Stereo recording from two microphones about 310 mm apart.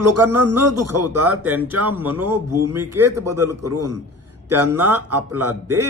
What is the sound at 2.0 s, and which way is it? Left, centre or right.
Speech, centre.